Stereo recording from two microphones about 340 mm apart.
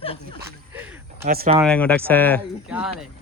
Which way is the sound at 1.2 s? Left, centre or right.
Right.